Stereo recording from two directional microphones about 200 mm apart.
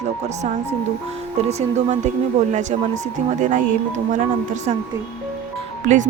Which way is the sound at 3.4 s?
40° right (ahead or behind).